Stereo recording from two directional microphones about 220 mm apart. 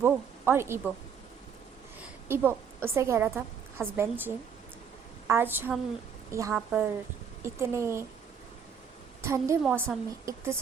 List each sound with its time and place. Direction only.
0.0 s speech: 10° right (ahead or behind)
2.2 s a woman's voice: 10° right (ahead or behind)
5.3 s a woman's voice: 10° right (ahead or behind)
9.2 s a woman's voice: 10° right (ahead or behind)